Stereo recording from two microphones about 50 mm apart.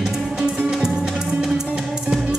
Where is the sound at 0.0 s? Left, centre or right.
Centre.